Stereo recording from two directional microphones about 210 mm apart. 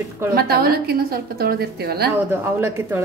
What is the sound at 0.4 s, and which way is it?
A woman's voice, 45° right (ahead or behind).